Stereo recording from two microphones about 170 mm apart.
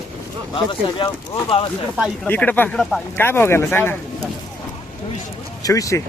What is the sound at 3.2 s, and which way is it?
Speech, 15° left (ahead or behind).